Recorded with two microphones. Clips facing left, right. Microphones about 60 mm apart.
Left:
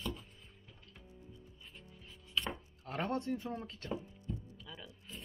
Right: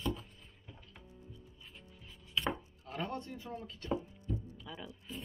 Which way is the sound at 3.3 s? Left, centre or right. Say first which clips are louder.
Left 5 dB; left.